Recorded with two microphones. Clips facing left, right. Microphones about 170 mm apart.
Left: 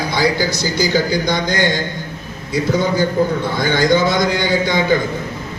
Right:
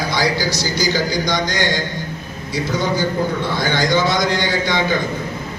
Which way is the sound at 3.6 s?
55° left (ahead or behind).